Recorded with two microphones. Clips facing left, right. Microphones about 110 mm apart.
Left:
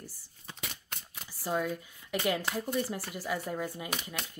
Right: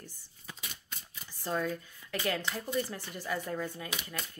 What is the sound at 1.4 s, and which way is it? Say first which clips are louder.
Speech: left 1 dB; 10° left (ahead or behind).